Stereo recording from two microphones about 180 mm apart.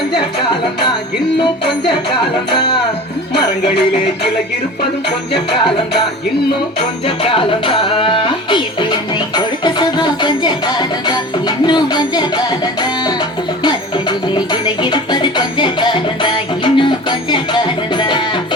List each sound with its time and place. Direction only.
7.2 s music: 30° left (ahead or behind)
14.3 s music: 25° left (ahead or behind)